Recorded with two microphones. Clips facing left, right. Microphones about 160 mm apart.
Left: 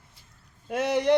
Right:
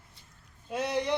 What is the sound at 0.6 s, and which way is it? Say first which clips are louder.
Speech: left 7 dB; 70° left (ahead or behind).